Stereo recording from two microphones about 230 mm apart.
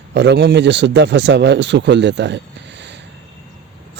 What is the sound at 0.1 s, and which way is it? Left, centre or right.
Speech, right.